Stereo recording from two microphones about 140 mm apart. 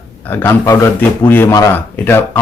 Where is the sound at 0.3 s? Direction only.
15° left (ahead or behind).